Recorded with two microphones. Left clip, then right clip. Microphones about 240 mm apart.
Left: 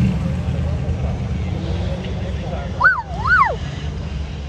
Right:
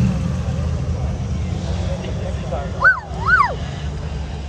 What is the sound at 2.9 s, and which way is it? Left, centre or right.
Dog, left.